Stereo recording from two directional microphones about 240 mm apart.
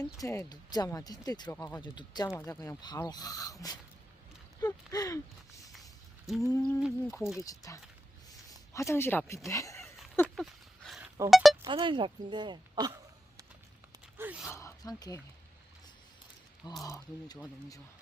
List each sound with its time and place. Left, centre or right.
0.0 s speech: centre
6.6 s speech: centre
7.3 s speech: centre
8.3 s a sound: centre
9.5 s speech: centre
9.8 s a sound: centre
11.3 s speech: centre
11.6 s a woman's voice: centre
14.2 s speech: centre
14.5 s speech: centre
16.8 s speech: centre